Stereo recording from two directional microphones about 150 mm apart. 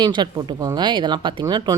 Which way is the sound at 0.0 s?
30° right (ahead or behind).